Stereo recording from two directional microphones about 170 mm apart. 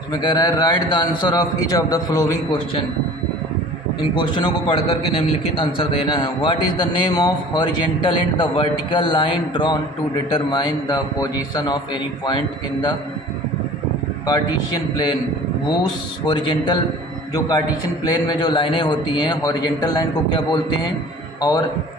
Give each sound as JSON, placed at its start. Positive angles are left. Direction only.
{"t": 0.1, "sound": "a man's voice", "side_deg": 25}
{"t": 4.1, "sound": "a man's voice", "side_deg": 25}
{"t": 14.3, "sound": "a man's voice", "side_deg": 25}
{"t": 18.0, "sound": "a man's voice", "side_deg": 25}